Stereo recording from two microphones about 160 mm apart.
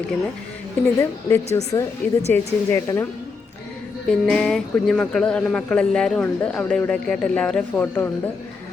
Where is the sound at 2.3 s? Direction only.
15° left (ahead or behind).